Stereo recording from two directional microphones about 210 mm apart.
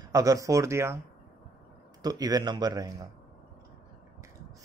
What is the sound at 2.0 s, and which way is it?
Speech, 20° right (ahead or behind).